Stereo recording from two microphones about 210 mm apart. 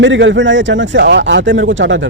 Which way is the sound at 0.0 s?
60° right (ahead or behind).